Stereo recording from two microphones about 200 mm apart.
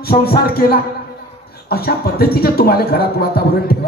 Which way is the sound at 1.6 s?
50° left (ahead or behind).